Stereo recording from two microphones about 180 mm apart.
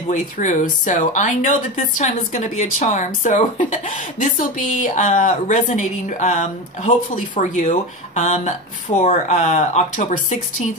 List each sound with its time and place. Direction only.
0.1 s speech: 45° left (ahead or behind)